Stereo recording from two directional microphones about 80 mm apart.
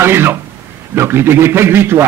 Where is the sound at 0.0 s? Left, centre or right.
Right.